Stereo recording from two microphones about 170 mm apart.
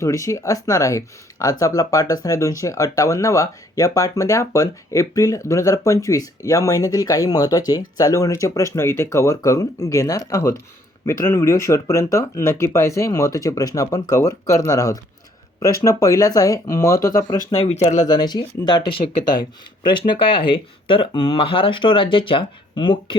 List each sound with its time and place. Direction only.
0.0 s speech: 20° left (ahead or behind)
17.7 s speech: 45° left (ahead or behind)
18.1 s speech: 25° left (ahead or behind)